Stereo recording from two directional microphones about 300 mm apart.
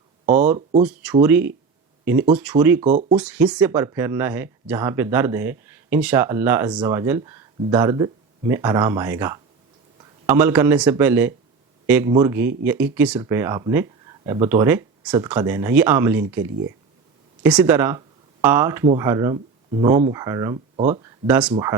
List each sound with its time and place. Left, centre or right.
0.8 s speech: centre
2.8 s speech: right
3.2 s speech: centre